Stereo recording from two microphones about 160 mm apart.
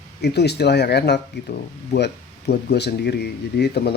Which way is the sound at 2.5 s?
90° left.